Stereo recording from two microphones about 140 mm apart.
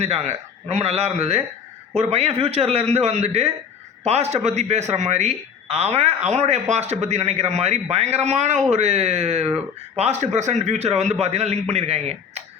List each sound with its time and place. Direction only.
0.0 s a man's voice: 50° right (ahead or behind)